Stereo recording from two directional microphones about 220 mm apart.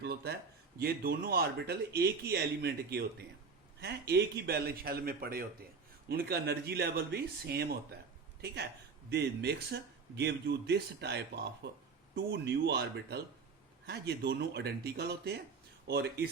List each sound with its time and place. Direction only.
0.0 s a sound: 45° right (ahead or behind)
0.8 s a man's voice: 45° right (ahead or behind)
9.0 s a man's voice: 50° right (ahead or behind)